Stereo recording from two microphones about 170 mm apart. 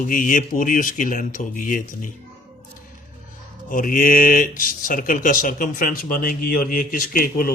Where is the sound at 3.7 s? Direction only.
55° left (ahead or behind).